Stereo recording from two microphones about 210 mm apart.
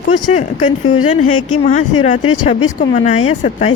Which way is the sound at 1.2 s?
90° left.